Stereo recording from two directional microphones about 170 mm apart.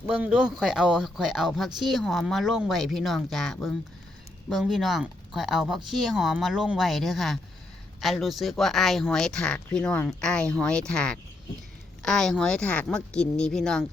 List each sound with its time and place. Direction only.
0.0 s speech: 5° right (ahead or behind)